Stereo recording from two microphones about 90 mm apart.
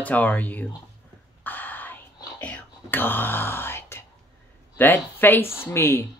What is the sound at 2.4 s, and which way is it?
Whispering, 20° left (ahead or behind).